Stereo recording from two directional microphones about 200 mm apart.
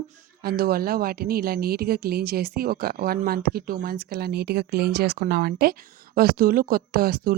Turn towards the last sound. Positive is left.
turn(degrees=-50)  # may be behind; listen again after turning